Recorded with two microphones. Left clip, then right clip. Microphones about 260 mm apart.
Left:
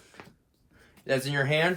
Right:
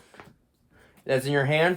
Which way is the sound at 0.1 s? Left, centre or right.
Right.